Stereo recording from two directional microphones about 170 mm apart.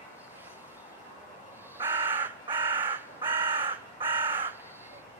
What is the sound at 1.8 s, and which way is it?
Crow, 10° right (ahead or behind).